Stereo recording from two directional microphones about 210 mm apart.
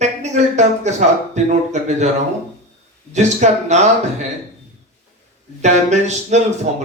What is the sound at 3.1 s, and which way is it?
Speech, 35° right (ahead or behind).